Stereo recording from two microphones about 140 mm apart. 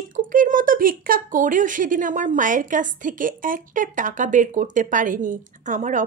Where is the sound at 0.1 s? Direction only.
75° right (ahead or behind).